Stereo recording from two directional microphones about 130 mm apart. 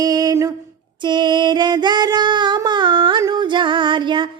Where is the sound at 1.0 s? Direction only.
35° right (ahead or behind).